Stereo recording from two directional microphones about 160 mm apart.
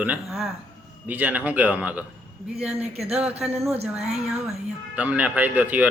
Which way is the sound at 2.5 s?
40° right (ahead or behind).